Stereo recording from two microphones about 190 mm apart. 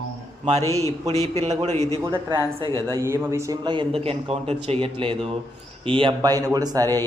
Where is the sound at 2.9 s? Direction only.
15° right (ahead or behind).